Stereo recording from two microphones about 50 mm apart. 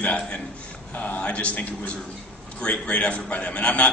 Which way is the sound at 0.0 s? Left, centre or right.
Left.